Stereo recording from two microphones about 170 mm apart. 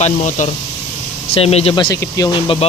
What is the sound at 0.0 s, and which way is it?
Speech, 45° left (ahead or behind).